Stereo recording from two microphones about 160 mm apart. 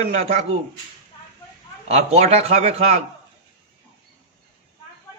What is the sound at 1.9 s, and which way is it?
A man's voice, 40° right (ahead or behind).